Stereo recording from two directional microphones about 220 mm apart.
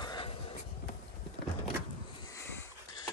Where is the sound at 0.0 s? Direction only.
20° left (ahead or behind).